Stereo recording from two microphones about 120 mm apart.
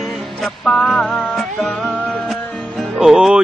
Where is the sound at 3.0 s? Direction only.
5° right (ahead or behind).